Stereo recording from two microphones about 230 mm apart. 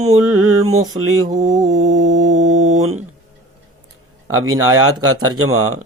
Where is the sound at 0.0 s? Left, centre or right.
Right.